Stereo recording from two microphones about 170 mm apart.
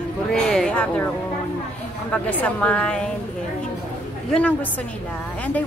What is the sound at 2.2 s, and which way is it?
Speech, 10° left (ahead or behind).